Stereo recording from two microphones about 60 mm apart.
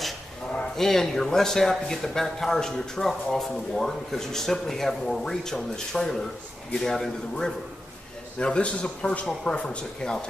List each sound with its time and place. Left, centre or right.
0.7 s a man's voice: centre